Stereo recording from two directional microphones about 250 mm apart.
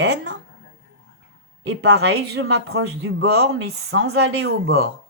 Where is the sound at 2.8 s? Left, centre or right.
Right.